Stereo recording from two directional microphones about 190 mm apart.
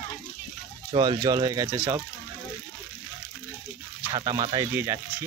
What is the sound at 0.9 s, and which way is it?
Speech, 20° right (ahead or behind).